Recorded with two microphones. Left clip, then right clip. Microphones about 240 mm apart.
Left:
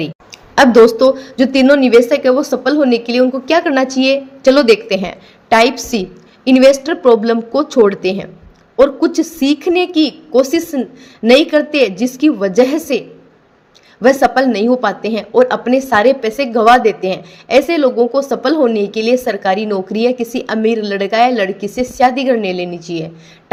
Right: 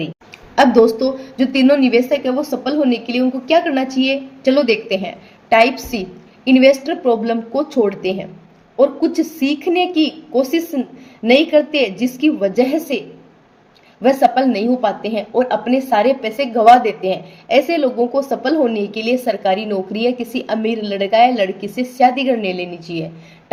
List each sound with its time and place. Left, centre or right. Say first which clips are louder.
0.5 s a woman's voice: left 4 dB; left